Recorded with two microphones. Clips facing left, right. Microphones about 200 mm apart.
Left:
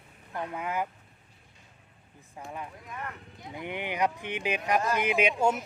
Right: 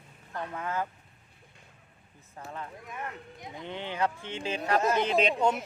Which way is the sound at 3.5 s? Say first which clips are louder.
Left 3 dB; 15° left (ahead or behind).